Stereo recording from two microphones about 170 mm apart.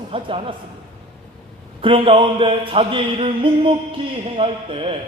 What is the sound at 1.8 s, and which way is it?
Speech, 30° right (ahead or behind).